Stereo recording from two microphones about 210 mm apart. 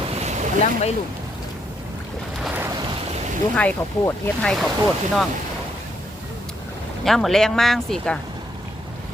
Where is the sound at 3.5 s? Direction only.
10° left (ahead or behind).